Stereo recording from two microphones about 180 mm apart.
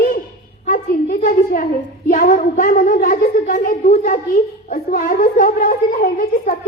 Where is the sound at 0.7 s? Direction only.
50° left (ahead or behind).